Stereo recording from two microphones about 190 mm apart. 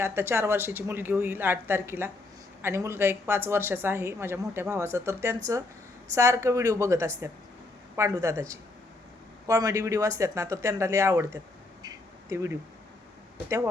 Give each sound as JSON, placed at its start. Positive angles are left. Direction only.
{"t": 0.0, "sound": "speech", "side_deg": -10}
{"t": 9.5, "sound": "speech", "side_deg": -20}
{"t": 11.8, "sound": "a sound", "side_deg": -20}